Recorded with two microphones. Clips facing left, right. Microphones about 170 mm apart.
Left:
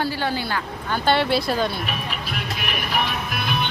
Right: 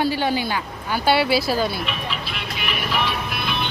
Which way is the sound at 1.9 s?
45° left (ahead or behind).